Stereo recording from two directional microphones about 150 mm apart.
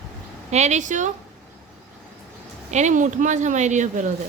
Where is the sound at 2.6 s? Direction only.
50° right (ahead or behind).